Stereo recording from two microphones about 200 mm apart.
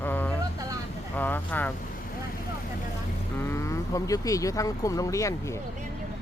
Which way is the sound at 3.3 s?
10° left (ahead or behind).